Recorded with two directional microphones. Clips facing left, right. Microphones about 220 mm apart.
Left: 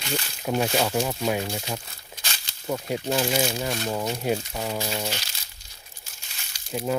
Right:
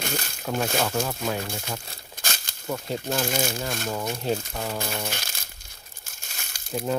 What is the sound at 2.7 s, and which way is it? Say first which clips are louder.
Speech: left 2 dB; 15° left (ahead or behind).